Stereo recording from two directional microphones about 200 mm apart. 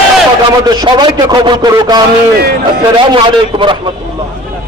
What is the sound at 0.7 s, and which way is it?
A man's voice, 20° right (ahead or behind).